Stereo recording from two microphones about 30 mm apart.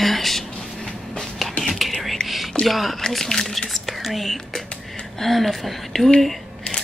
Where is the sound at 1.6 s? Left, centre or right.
Centre.